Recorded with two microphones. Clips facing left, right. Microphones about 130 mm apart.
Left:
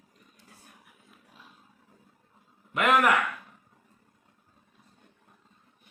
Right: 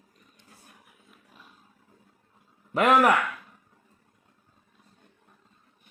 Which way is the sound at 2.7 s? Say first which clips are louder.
Right 3 dB; 35° right (ahead or behind).